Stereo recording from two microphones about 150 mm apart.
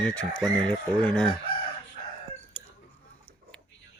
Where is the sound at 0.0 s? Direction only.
5° left (ahead or behind).